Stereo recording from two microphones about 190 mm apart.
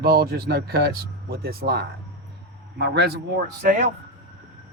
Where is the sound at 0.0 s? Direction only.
55° right (ahead or behind).